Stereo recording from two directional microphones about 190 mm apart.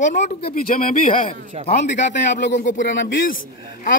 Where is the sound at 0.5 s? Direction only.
50° left (ahead or behind).